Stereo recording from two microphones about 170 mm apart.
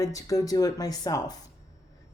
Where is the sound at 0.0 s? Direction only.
20° left (ahead or behind).